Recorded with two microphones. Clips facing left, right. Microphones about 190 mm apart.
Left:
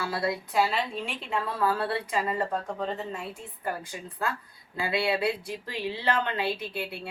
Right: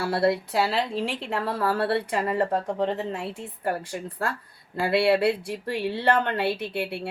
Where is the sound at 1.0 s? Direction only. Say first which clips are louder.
Right 4 dB; 80° right.